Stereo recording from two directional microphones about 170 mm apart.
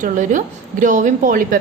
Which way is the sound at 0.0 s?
50° right (ahead or behind).